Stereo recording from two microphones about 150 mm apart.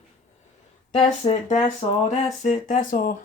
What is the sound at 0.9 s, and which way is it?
Speech, 40° left (ahead or behind).